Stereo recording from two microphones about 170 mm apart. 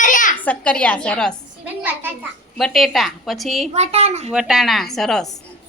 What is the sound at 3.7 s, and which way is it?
Speech, 40° right (ahead or behind).